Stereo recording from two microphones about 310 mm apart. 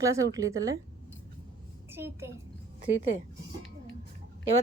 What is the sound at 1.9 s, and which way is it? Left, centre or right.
Speech, centre.